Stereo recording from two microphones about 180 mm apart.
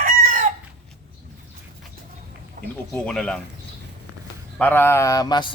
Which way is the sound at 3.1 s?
5° left (ahead or behind).